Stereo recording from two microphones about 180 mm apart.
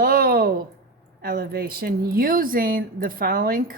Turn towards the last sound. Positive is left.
turn(degrees=-55)  # may be behind; listen again after turning